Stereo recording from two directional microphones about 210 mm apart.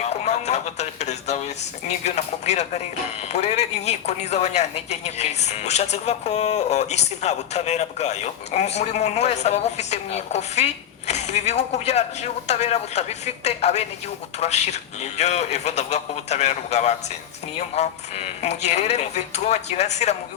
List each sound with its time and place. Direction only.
0.0 s music: 30° left (ahead or behind)
1.9 s a woman's voice: 30° left (ahead or behind)